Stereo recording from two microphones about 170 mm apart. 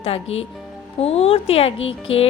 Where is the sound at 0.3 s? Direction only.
35° left (ahead or behind).